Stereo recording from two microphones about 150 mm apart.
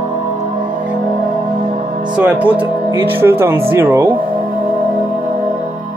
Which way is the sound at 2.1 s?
10° right (ahead or behind).